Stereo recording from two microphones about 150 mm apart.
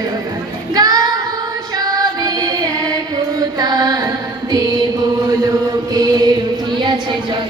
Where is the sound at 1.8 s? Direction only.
25° right (ahead or behind).